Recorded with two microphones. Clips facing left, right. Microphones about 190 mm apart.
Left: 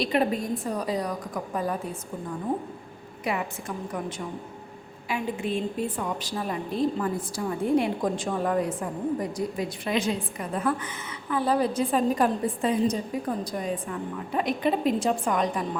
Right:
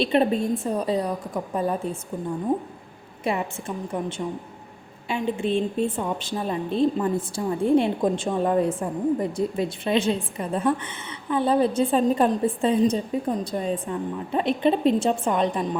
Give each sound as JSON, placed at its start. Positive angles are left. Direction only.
{"t": 0.0, "sound": "a woman's voice", "side_deg": -25}
{"t": 3.3, "sound": "a woman's voice", "side_deg": -30}
{"t": 5.0, "sound": "a woman's voice", "side_deg": -25}